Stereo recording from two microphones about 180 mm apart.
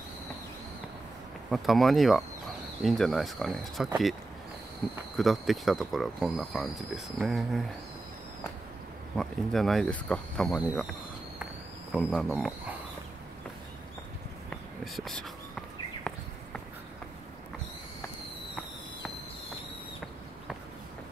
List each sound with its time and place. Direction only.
1.5 s speech: centre (ahead or behind)
5.1 s speech: centre (ahead or behind)
9.1 s speech: centre (ahead or behind)
11.9 s speech: centre (ahead or behind)
14.5 s walk: centre (ahead or behind)